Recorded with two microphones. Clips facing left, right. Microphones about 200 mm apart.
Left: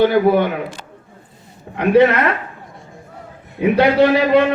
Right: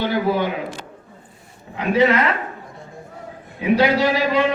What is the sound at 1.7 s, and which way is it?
Speech, 60° left (ahead or behind).